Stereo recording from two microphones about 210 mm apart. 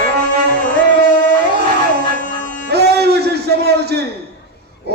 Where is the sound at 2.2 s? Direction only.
35° left (ahead or behind).